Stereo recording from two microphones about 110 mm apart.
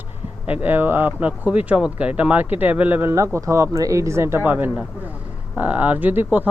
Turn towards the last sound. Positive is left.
turn(degrees=-15)  # may be behind; listen again after turning